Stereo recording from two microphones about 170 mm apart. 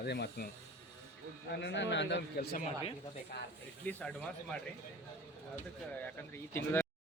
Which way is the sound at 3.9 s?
10° left (ahead or behind).